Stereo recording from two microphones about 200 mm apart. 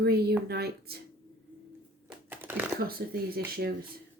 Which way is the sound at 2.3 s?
10° right (ahead or behind).